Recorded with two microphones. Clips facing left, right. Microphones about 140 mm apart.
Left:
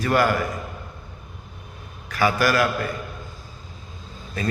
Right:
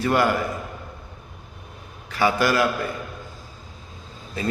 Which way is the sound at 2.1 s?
25° right (ahead or behind).